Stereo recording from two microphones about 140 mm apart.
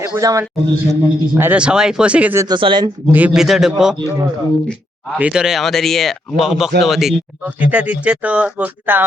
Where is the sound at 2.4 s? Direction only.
35° right (ahead or behind).